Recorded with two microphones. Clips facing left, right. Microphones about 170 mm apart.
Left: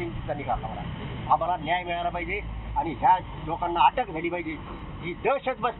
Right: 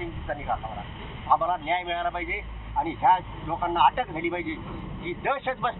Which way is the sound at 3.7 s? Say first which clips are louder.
Even; 15° left (ahead or behind).